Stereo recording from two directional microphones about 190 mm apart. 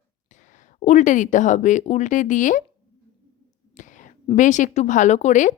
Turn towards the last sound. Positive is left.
turn(degrees=40)  # may be behind; listen again after turning